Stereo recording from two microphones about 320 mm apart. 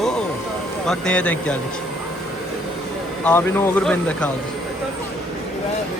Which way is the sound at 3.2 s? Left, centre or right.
Centre.